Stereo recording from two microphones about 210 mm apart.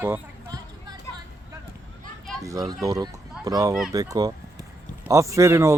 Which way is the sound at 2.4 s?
15° right (ahead or behind).